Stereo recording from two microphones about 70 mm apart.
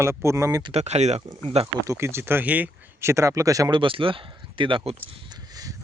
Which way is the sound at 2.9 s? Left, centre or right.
Right.